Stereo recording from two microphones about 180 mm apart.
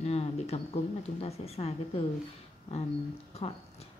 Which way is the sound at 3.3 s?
35° left (ahead or behind).